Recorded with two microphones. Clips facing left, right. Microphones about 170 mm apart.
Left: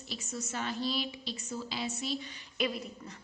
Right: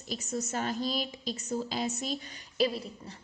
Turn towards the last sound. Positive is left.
turn(degrees=-30)  # may be behind; listen again after turning